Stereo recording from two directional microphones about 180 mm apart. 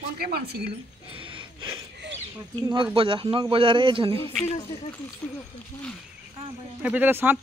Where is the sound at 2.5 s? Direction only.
25° right (ahead or behind).